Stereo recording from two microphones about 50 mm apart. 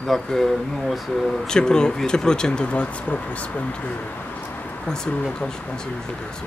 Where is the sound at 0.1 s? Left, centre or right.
Centre.